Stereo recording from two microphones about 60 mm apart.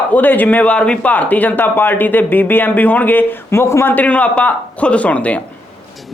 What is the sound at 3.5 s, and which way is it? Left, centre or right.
Speech, left.